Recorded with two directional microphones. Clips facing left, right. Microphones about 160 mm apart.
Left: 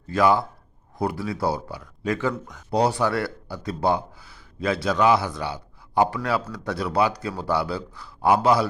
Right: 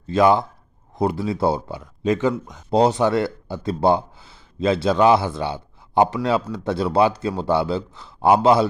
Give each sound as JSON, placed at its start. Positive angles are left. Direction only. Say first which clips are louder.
{"t": 0.1, "sound": "speech", "louder": "right 3 dB", "side_deg": -20}